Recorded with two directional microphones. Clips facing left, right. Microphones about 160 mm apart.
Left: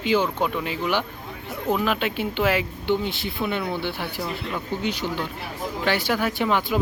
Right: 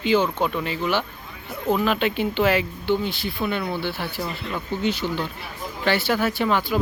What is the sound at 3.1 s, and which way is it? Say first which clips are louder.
Speech: right 1 dB; 20° left (ahead or behind).